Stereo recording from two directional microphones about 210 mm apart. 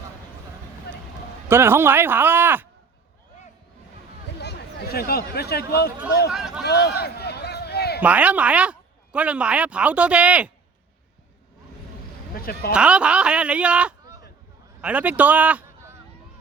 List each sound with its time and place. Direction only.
1.5 s speech: 10° right (ahead or behind)
4.4 s speech: 50° left (ahead or behind)
6.3 s a sound: centre (ahead or behind)
6.7 s a sound: 50° left (ahead or behind)
8.0 s speech: 5° right (ahead or behind)
12.3 s speech: 45° left (ahead or behind)
12.7 s a man's voice: 5° right (ahead or behind)